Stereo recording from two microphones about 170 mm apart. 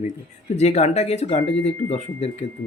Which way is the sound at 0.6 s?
40° left (ahead or behind).